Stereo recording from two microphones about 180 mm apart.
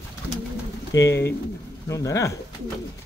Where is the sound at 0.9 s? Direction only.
15° left (ahead or behind).